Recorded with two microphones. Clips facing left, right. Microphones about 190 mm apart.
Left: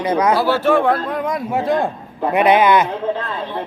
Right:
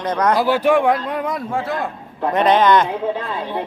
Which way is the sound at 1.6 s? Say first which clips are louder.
Left 6 dB; 25° left (ahead or behind).